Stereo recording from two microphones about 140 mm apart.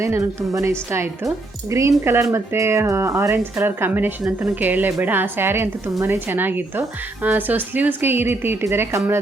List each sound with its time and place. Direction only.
0.0 s speech: 20° right (ahead or behind)